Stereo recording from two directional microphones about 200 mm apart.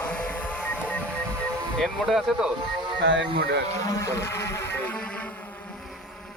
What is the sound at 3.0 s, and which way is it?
Speech, 65° right (ahead or behind).